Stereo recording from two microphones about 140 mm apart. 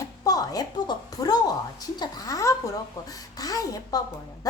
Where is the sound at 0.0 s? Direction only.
25° left (ahead or behind).